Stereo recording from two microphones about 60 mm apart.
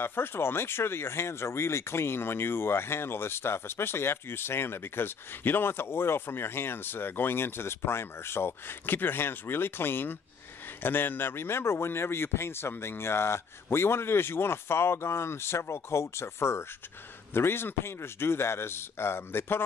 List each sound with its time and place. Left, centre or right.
0.0 s a man's voice: left